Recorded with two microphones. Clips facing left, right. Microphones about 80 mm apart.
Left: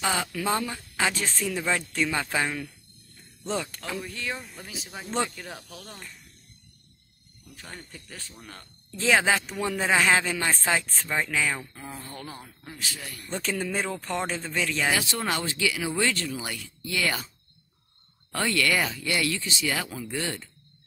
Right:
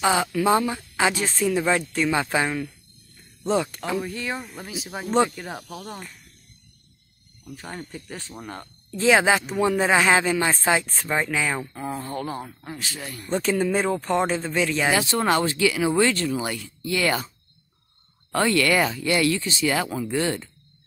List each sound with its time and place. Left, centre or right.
0.0 s speech: centre
3.7 s speech: centre
7.9 s speech: right
8.9 s speech: centre
11.7 s speech: right
12.3 s speech: right
12.7 s speech: right
13.3 s speech: centre
14.9 s speech: right
18.3 s speech: right